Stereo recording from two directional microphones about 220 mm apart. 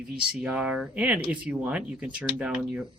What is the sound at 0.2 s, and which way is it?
Speech, 5° right (ahead or behind).